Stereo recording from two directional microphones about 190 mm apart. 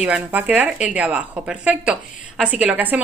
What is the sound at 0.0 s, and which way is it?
Speech, 5° right (ahead or behind).